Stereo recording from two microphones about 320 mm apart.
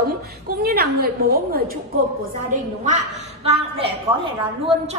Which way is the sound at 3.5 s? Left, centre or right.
Centre.